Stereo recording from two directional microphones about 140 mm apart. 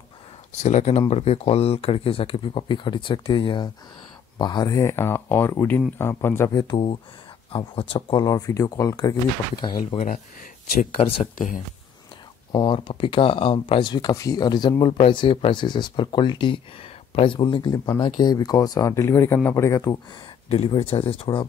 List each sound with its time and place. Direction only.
0.6 s speech: 55° left (ahead or behind); by 6.6 s 20° left (ahead or behind)
6.7 s speech: 40° left (ahead or behind)
11.3 s speech: 70° left (ahead or behind)
12.5 s speech: 35° left (ahead or behind); by 20.0 s 20° left (ahead or behind)
20.4 s speech: 45° left (ahead or behind)